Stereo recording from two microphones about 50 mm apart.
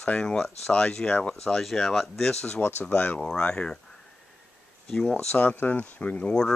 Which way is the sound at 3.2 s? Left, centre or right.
Centre.